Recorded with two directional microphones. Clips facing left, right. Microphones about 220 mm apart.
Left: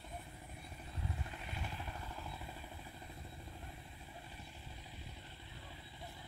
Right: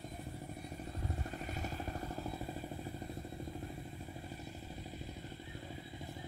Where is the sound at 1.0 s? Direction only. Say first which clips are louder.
Right 4 dB; 45° right (ahead or behind).